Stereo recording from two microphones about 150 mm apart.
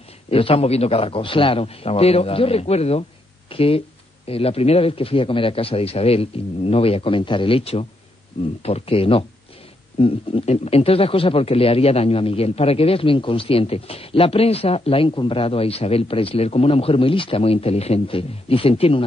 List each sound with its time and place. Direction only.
0.3 s speech: 40° left (ahead or behind)